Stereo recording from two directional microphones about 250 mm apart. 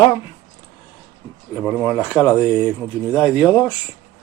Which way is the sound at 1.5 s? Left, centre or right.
Centre.